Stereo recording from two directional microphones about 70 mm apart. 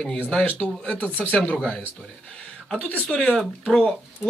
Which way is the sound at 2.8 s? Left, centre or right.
Centre.